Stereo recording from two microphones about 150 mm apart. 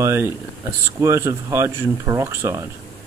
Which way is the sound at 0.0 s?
20° right (ahead or behind).